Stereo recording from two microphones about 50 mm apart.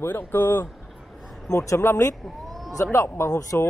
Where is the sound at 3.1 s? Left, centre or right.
Left.